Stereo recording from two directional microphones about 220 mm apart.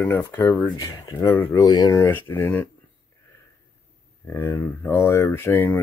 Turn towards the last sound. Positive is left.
turn(degrees=10)  # may be behind; listen again after turning